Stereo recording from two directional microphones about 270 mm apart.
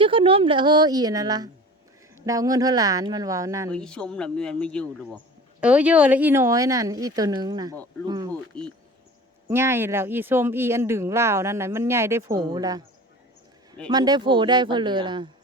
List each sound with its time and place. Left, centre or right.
0.0 s speech: centre
3.7 s a man's voice: centre
8.3 s a man's voice: centre
9.5 s speech: centre
13.8 s speech: centre